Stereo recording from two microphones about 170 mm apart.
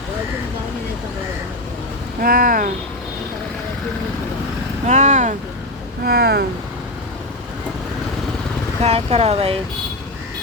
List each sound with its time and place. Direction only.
2.2 s speech: 55° right (ahead or behind)
4.9 s vehicle: 45° right (ahead or behind)
6.1 s speech: 70° right (ahead or behind)
8.8 s speech: 35° right (ahead or behind)